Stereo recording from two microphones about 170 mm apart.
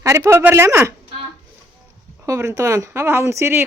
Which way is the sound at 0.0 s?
15° right (ahead or behind).